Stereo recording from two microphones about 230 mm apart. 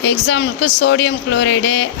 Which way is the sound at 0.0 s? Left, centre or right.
Left.